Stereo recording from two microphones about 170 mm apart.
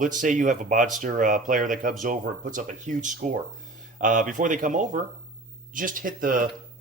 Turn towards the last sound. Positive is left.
turn(degrees=-55)  # may be behind; listen again after turning